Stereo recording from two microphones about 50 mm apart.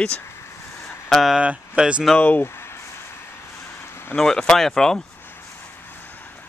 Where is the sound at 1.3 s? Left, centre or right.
Centre.